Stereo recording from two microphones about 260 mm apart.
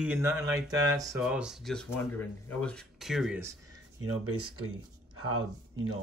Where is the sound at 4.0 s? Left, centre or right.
Right.